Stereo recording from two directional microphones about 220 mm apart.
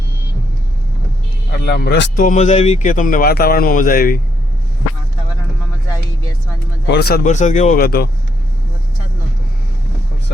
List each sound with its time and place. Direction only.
1.5 s speech: 45° left (ahead or behind)
6.8 s speech: 50° left (ahead or behind)